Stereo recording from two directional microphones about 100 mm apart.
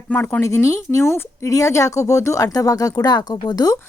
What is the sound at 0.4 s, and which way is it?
Speech, 30° left (ahead or behind).